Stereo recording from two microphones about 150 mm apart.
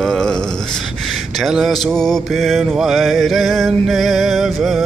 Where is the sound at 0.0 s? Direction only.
5° left (ahead or behind).